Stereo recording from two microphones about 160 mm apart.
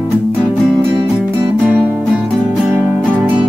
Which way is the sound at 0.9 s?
20° right (ahead or behind).